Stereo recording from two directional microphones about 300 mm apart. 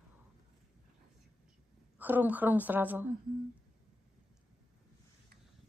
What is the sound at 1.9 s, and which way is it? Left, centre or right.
A woman's voice, centre.